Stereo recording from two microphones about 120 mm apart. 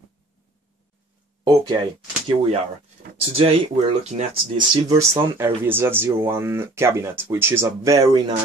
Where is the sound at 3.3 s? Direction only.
50° right (ahead or behind).